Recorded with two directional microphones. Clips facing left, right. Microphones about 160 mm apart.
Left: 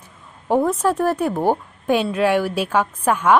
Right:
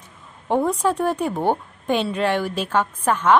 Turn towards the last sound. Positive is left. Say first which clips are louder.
# left 1 dB
turn(degrees=10)  # may be behind; listen again after turning